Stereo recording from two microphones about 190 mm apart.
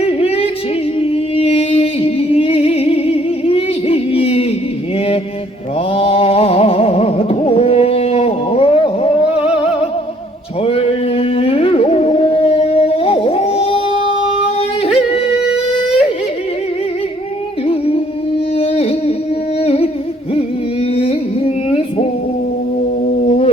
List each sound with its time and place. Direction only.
0.0 s music: 30° left (ahead or behind)
0.9 s singing: 30° left (ahead or behind)
4.9 s mantra: 30° left (ahead or behind)
5.9 s music: 30° left (ahead or behind)
10.6 s music: 30° left (ahead or behind)
14.9 s yodeling: 30° left (ahead or behind)
17.7 s music: 30° left (ahead or behind)
19.5 s humming: 30° left (ahead or behind)
20.9 s music: 30° left (ahead or behind)
23.2 s a sound: 35° left (ahead or behind)